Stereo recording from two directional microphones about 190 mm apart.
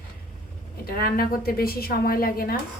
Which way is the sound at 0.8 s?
50° left (ahead or behind).